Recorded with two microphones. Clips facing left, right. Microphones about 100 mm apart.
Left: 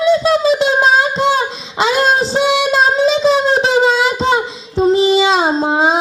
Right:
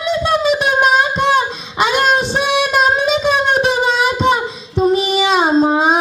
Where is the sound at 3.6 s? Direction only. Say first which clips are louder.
Left 2 dB; 30° left (ahead or behind).